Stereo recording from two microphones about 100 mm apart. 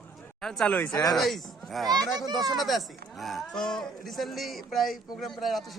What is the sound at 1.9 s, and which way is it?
Speech, 40° right (ahead or behind).